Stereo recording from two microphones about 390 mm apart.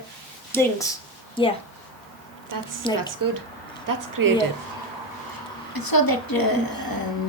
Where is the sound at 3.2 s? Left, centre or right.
Right.